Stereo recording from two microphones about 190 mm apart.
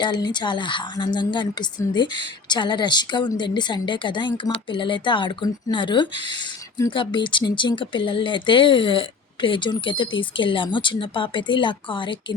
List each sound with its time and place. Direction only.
0.0 s speech: 25° left (ahead or behind)